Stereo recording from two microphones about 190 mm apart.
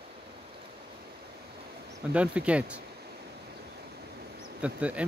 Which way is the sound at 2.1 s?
5° right (ahead or behind).